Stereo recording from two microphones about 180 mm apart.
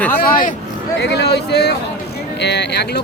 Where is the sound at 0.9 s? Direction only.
65° left (ahead or behind).